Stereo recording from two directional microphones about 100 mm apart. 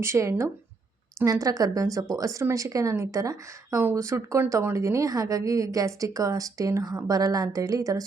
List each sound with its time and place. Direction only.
0.0 s a woman's voice: 30° right (ahead or behind)
3.8 s speech: 20° right (ahead or behind)
4.0 s a woman's voice: 30° right (ahead or behind)